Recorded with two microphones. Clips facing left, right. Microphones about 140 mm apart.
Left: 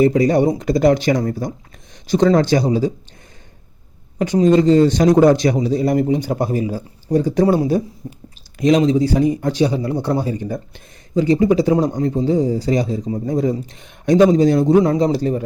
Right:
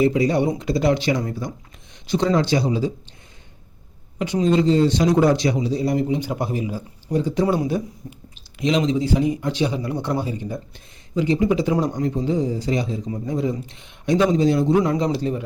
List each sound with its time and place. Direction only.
0.0 s a man's voice: 45° left (ahead or behind)
4.2 s a man's voice: 45° left (ahead or behind)
7.4 s speech: 35° left (ahead or behind)
8.5 s speech: 40° left (ahead or behind)